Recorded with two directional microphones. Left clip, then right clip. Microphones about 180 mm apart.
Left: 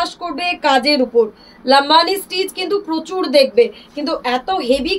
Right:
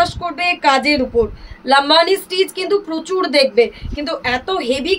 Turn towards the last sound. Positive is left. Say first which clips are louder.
# left 2 dB
turn(degrees=-25)  # may be behind; listen again after turning